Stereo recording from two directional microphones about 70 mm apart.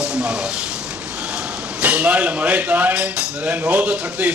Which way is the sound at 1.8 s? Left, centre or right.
Right.